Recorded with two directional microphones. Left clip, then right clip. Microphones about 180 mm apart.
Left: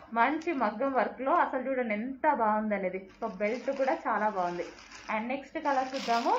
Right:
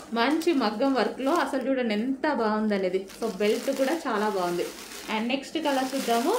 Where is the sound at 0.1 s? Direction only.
50° right (ahead or behind).